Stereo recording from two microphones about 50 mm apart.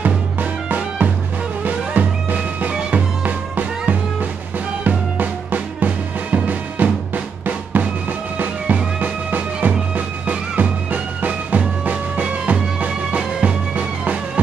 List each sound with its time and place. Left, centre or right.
0.0 s music: right
7.8 s drum: right
9.0 s music: right